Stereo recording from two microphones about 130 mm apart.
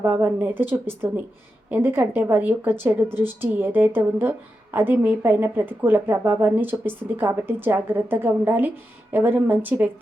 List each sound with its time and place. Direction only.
0.0 s a woman's voice: 15° right (ahead or behind)